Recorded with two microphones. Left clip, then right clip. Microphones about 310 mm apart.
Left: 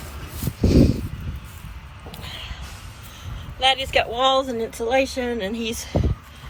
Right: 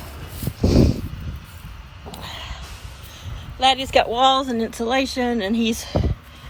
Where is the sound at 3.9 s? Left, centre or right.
Right.